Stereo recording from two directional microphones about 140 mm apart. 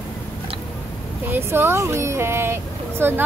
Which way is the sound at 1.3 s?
15° right (ahead or behind).